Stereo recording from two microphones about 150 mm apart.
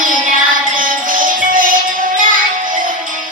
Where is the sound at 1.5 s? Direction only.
65° right (ahead or behind).